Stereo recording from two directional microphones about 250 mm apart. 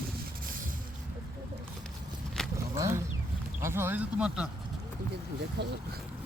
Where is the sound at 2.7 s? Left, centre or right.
Centre.